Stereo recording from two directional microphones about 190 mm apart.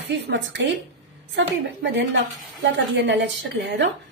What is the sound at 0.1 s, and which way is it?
A woman's voice, 70° right (ahead or behind).